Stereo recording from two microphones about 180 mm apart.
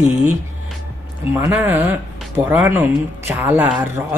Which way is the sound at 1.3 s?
10° right (ahead or behind).